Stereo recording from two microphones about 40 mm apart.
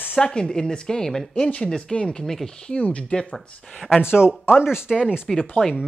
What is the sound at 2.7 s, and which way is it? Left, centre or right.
Speech, left.